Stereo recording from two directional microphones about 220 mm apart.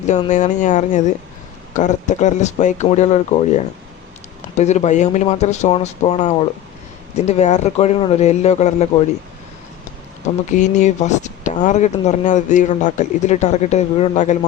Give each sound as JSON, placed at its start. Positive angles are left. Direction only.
{"t": 0.3, "sound": "a man's voice", "side_deg": 35}
{"t": 10.5, "sound": "speech", "side_deg": 35}